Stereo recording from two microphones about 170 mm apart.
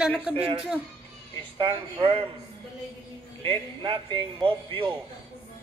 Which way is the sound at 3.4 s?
30° right (ahead or behind).